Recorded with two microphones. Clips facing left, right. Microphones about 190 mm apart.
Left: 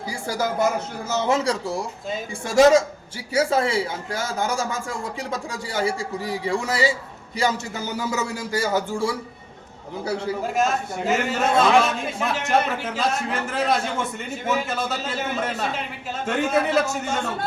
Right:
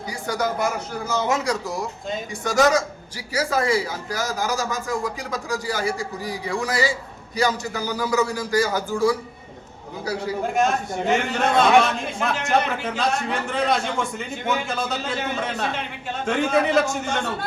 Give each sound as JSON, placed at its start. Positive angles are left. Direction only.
{"t": 0.1, "sound": "speech", "side_deg": 30}
{"t": 10.4, "sound": "a man's voice", "side_deg": 0}